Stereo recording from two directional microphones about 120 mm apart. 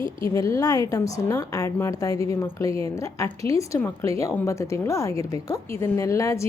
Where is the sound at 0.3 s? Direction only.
25° left (ahead or behind).